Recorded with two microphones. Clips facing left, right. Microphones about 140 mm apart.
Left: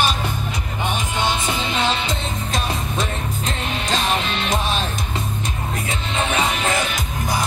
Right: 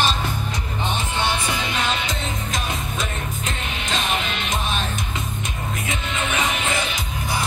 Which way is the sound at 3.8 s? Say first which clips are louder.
Left 3 dB; 35° left (ahead or behind).